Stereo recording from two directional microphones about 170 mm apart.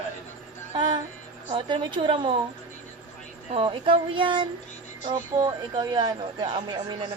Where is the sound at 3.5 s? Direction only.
30° right (ahead or behind).